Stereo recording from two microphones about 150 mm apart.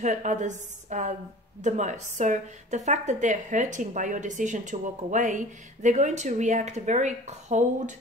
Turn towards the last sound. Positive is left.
turn(degrees=-55)  # may be behind; listen again after turning